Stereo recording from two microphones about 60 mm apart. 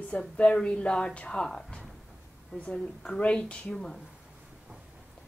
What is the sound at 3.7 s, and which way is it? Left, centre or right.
Speech, centre.